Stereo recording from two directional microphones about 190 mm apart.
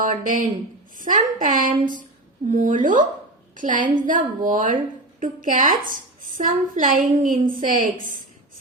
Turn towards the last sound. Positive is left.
turn(degrees=-45)  # may be behind; listen again after turning